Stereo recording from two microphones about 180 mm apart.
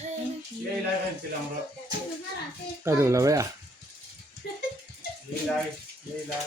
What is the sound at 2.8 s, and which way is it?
Speech, 15° right (ahead or behind).